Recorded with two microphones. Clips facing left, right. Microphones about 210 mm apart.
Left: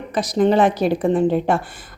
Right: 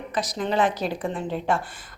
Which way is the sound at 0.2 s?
60° left (ahead or behind).